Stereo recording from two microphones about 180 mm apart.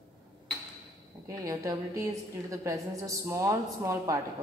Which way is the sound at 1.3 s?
20° right (ahead or behind).